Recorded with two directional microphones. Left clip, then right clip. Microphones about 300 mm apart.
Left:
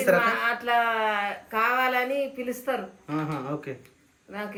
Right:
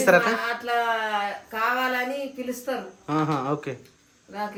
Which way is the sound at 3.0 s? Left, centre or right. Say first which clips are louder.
Right 6 dB; centre.